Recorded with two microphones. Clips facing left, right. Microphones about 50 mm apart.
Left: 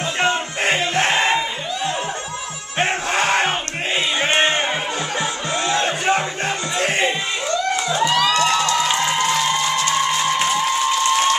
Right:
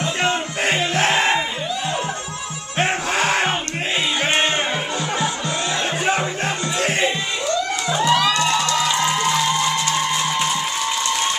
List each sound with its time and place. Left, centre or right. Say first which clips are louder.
0.2 s music: left 3 dB; centre
2.8 s music: even; centre
6.0 s music: left 1 dB; centre
8.0 s music: right 1 dB; centre